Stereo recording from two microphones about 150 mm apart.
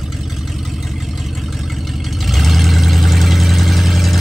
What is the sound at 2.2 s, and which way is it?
Vehicle, centre (ahead or behind).